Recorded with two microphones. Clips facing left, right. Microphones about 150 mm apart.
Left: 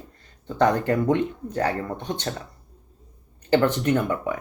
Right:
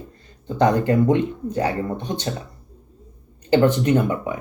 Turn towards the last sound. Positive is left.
turn(degrees=-15)  # may be behind; listen again after turning